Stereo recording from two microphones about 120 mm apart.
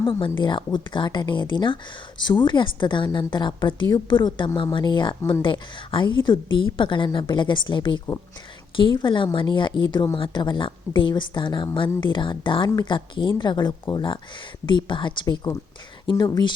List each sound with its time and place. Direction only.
0.0 s speech: 40° left (ahead or behind)